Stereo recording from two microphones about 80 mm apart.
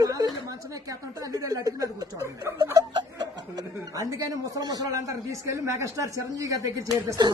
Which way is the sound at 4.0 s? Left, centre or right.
Right.